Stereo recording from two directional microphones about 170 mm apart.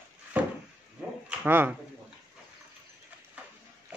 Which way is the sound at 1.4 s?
10° right (ahead or behind).